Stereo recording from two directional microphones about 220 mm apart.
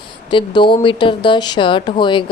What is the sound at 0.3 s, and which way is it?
Speech, 20° left (ahead or behind).